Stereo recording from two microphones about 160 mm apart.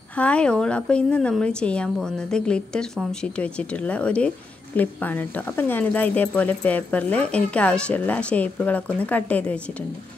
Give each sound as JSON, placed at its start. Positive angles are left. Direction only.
{"t": 0.2, "sound": "speech", "side_deg": 5}